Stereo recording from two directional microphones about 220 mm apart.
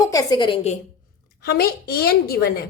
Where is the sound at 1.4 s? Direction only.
45° left (ahead or behind).